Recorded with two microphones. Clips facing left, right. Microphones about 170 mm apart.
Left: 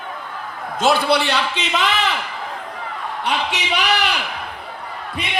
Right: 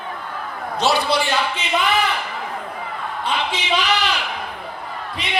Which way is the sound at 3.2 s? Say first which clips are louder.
Left 1 dB; 75° left (ahead or behind).